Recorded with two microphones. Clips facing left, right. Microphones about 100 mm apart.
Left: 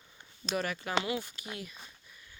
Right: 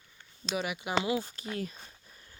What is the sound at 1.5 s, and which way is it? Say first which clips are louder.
Speech: right 9 dB; 35° right (ahead or behind).